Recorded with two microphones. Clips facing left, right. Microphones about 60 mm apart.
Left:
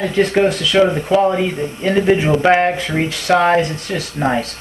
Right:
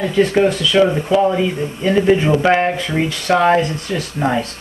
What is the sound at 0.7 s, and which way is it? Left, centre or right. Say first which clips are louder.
Speech: even; centre.